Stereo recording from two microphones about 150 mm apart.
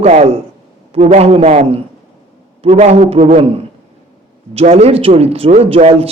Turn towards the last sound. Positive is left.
turn(degrees=-40)  # may be behind; listen again after turning